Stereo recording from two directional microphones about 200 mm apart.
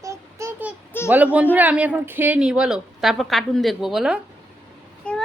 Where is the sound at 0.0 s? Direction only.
15° right (ahead or behind).